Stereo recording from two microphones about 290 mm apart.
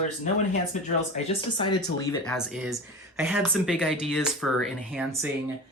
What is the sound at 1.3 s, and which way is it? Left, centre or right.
Speech, centre.